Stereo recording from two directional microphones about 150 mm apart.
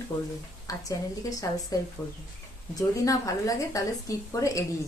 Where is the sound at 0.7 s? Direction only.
20° left (ahead or behind).